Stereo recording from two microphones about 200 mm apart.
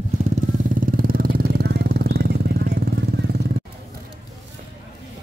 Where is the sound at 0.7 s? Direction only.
45° right (ahead or behind).